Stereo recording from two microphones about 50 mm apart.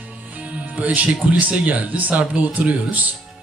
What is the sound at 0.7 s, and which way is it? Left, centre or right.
Speech, right.